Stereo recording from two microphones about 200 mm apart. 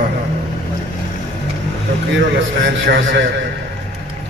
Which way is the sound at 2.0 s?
60° right (ahead or behind).